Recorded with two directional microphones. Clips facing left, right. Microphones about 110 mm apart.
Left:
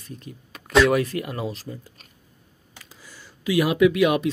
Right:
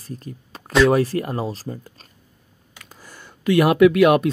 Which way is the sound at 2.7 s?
50° right (ahead or behind).